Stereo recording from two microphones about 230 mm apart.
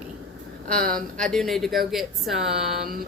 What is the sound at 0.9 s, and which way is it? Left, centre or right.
Speech, centre.